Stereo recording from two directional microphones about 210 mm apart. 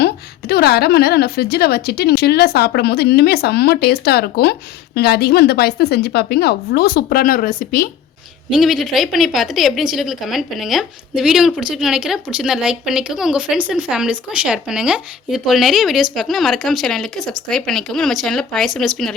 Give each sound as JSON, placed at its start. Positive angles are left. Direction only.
{"t": 0.0, "sound": "a woman's voice", "side_deg": 50}
{"t": 8.4, "sound": "speech", "side_deg": 0}